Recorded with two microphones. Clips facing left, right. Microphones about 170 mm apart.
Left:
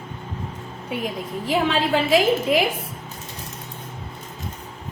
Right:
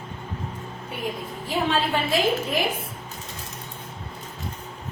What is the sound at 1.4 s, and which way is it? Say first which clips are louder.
A woman's voice: left 3 dB; 90° left.